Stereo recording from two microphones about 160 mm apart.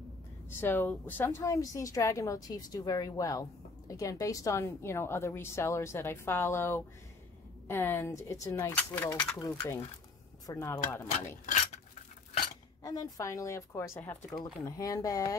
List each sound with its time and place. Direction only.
0.5 s a woman's voice: 15° left (ahead or behind)
9.4 s a woman's voice: 25° left (ahead or behind)
12.8 s a woman's voice: 20° left (ahead or behind)